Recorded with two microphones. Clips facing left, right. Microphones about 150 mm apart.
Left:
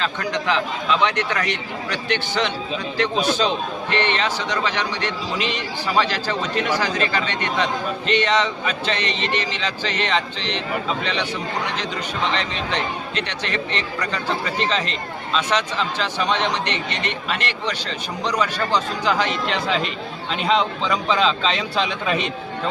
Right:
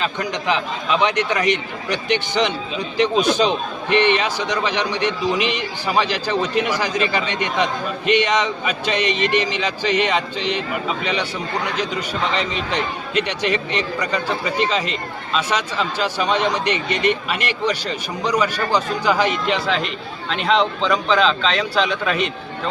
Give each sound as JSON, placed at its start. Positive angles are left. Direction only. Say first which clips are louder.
{"t": 0.0, "sound": "a man's voice", "louder": "right 1 dB", "side_deg": -15}
{"t": 12.3, "sound": "a man's voice", "louder": "right 2 dB", "side_deg": -10}
{"t": 20.3, "sound": "a man's voice", "louder": "right 2 dB", "side_deg": 0}